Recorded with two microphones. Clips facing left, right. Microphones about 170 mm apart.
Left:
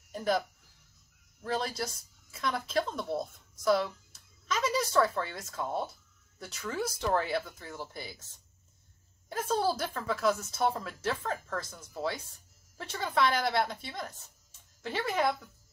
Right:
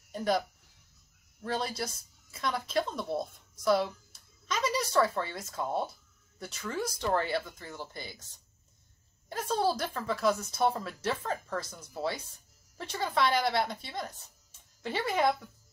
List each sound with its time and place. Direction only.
0.1 s speech: centre (ahead or behind)
1.4 s a woman's voice: centre (ahead or behind)
9.3 s a woman's voice: 5° left (ahead or behind)